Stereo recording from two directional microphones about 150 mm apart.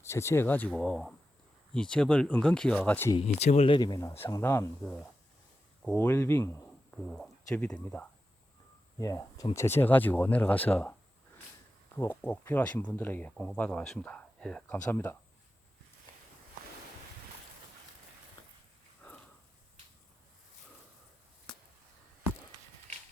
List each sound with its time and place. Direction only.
0.0 s speech: 20° left (ahead or behind)
3.2 s speech: 45° left (ahead or behind)
3.8 s speech: 25° left (ahead or behind)
4.8 s speech: 5° left (ahead or behind)
6.9 s speech: 5° left (ahead or behind)
9.0 s speech: 25° left (ahead or behind)
11.9 s speech: 15° left (ahead or behind)
13.3 s speech: centre (ahead or behind)
19.0 s a sound: 10° left (ahead or behind)